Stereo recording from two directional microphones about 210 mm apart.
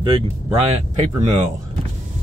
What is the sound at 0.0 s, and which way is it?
Speech, 25° right (ahead or behind).